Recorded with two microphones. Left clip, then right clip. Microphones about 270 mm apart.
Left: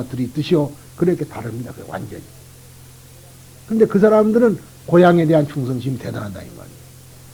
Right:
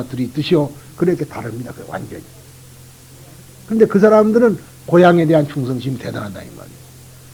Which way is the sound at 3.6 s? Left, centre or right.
Left.